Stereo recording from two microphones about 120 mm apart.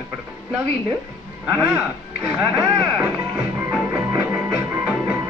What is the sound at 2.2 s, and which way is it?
Music, 15° right (ahead or behind).